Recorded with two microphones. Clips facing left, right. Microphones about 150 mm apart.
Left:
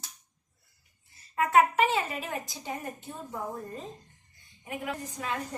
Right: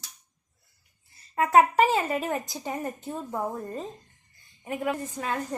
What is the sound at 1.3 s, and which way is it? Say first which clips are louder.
Speech: right 3 dB; 35° right (ahead or behind).